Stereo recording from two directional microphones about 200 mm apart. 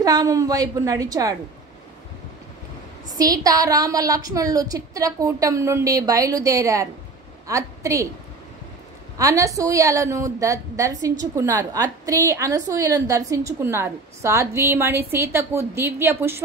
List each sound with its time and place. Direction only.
0.0 s a woman's voice: 20° right (ahead or behind)
3.2 s a woman's voice: 20° right (ahead or behind)
9.2 s a woman's voice: 15° right (ahead or behind)